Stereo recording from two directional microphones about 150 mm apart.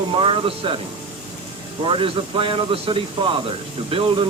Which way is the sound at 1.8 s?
35° right (ahead or behind).